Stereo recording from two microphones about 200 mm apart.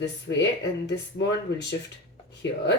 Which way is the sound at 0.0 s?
60° left (ahead or behind).